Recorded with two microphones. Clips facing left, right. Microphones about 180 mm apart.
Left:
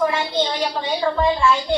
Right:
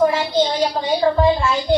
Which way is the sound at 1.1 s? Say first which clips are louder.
Right 5 dB; 35° right (ahead or behind).